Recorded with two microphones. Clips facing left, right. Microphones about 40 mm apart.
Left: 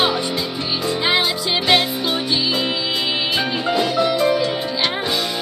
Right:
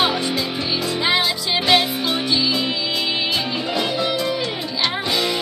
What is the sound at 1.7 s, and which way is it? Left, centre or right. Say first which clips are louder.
Music: even; centre.